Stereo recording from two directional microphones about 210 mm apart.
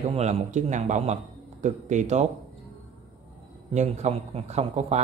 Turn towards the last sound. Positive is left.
turn(degrees=-30)  # may be behind; listen again after turning